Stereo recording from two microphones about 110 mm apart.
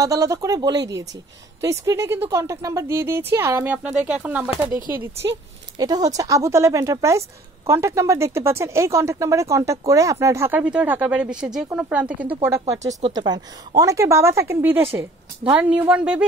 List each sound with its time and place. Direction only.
0.0 s speech: 30° right (ahead or behind)
5.8 s speech: 35° right (ahead or behind)
10.6 s speech: 10° right (ahead or behind)
12.6 s speech: 80° right
13.1 s speech: 40° right (ahead or behind)
13.7 s speech: 30° right (ahead or behind); by 16.3 s 10° right (ahead or behind)